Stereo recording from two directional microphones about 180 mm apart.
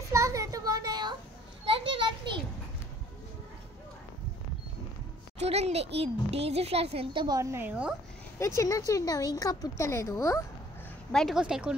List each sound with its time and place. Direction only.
0.1 s a sound: 15° right (ahead or behind)
1.7 s children playing: 30° right (ahead or behind)
5.4 s a child's voice: 35° right (ahead or behind); by 7.9 s 10° right (ahead or behind)
8.4 s speech: 15° left (ahead or behind)
11.1 s speech: centre (ahead or behind)